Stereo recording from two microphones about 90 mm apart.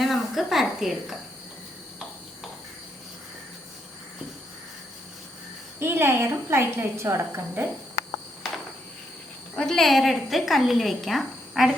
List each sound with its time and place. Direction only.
0.0 s a woman's voice: centre (ahead or behind)
5.8 s a woman's voice: 25° right (ahead or behind)
9.6 s a woman's voice: 5° left (ahead or behind)